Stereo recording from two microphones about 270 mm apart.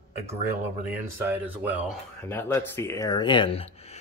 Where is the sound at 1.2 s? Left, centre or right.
Centre.